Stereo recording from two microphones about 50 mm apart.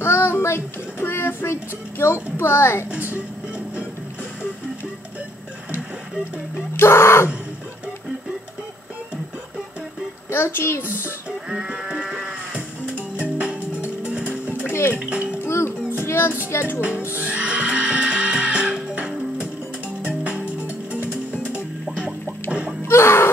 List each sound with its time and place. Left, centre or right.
0.0 s child singing: left
2.9 s speech: right
6.8 s a sound: left
10.3 s a woman's voice: left
11.2 s sheep: centre
12.3 s music: right
14.7 s music: left
15.0 s music: right
15.4 s music: left
16.0 s child singing: left
17.2 s music: right
22.8 s music: left